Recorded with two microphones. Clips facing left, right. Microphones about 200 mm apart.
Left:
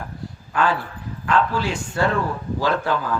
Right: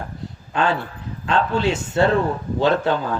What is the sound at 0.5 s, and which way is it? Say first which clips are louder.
Speech: right 1 dB; 25° right (ahead or behind).